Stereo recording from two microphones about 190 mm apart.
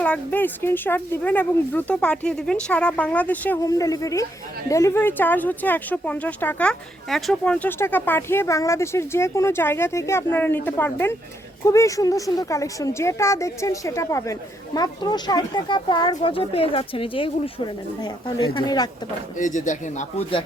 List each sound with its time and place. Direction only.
0.0 s speech: 10° left (ahead or behind); by 18.9 s 25° left (ahead or behind)
19.4 s a man's voice: 40° left (ahead or behind)